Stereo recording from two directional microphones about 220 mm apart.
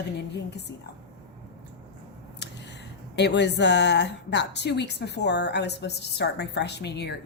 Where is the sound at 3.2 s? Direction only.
50° left (ahead or behind).